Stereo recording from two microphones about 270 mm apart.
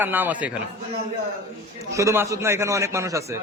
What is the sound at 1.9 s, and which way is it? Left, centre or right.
A man's voice, centre.